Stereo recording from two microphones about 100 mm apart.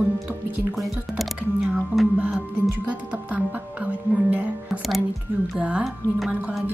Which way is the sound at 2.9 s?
15° right (ahead or behind).